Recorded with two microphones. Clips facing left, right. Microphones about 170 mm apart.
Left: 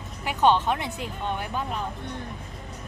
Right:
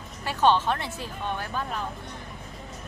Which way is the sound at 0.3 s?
15° left (ahead or behind).